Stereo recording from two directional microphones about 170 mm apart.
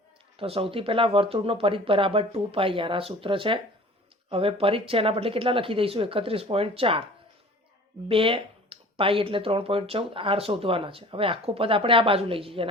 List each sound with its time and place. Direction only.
0.3 s speech: 35° right (ahead or behind)
8.0 s speech: 30° right (ahead or behind)